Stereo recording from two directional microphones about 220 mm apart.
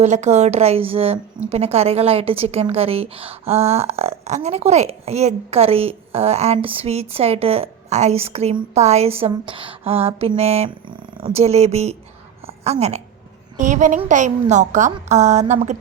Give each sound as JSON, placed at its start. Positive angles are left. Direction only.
{"t": 0.0, "sound": "a woman's voice", "side_deg": -30}